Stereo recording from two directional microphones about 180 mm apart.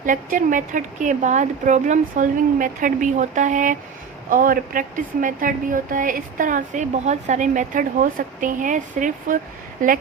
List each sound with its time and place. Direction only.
0.0 s speech: 50° right (ahead or behind)